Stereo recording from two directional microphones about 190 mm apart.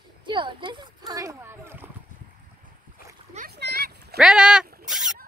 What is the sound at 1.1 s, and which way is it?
Splash, 20° right (ahead or behind).